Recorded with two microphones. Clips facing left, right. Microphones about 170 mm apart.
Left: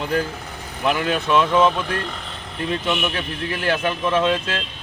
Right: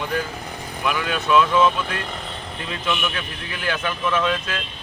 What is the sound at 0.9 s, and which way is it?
A man's voice, 30° left (ahead or behind).